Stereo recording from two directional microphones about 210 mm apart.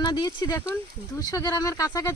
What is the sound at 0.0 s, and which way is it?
Speech, 20° left (ahead or behind).